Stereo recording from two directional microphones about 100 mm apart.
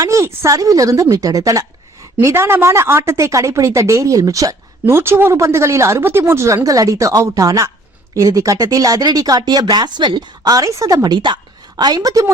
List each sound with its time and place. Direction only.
0.0 s speech: 30° right (ahead or behind)
2.2 s a woman's voice: 25° right (ahead or behind); by 12.2 s 40° right (ahead or behind)